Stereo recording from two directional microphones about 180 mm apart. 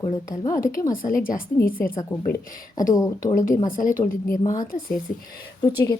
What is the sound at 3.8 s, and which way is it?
Speech, 50° left (ahead or behind).